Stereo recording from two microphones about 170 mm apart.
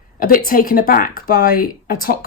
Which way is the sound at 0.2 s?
55° left (ahead or behind).